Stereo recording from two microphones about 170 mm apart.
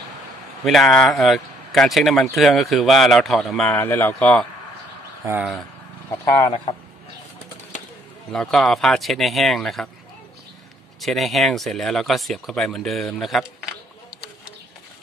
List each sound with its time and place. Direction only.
0.7 s speech: centre (ahead or behind)
5.2 s speech: 10° right (ahead or behind)
6.0 s speech: 20° left (ahead or behind)
8.3 s speech: 5° left (ahead or behind)
11.0 s speech: centre (ahead or behind)